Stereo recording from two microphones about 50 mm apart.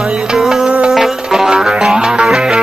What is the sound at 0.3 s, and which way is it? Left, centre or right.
Music, centre.